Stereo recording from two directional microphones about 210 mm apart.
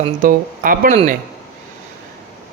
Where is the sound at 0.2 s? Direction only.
40° right (ahead or behind).